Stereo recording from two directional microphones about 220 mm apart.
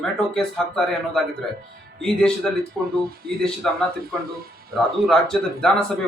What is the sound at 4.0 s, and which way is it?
Speech, 40° right (ahead or behind).